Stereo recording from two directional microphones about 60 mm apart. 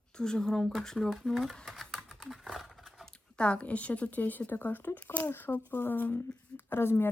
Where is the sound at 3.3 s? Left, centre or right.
Centre.